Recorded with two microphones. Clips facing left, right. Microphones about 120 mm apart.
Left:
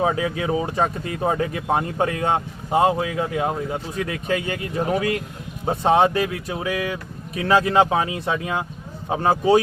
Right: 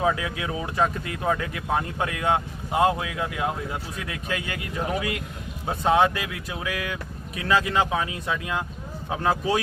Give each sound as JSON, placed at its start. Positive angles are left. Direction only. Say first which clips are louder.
{"t": 0.0, "sound": "speech", "louder": "left 4 dB", "side_deg": 35}